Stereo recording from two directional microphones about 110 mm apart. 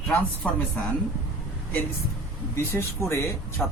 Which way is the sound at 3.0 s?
25° left (ahead or behind).